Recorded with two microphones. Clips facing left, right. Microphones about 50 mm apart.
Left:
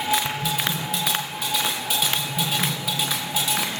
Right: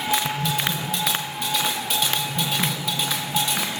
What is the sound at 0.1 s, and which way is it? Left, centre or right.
Music, centre.